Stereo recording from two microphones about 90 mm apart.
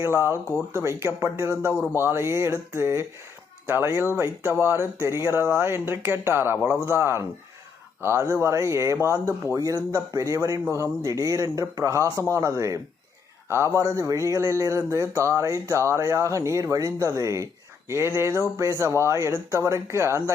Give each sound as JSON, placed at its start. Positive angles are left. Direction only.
{"t": 0.0, "sound": "speech", "side_deg": -30}